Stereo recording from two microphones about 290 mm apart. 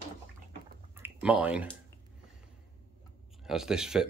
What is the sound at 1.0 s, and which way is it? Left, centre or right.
Clicking, centre.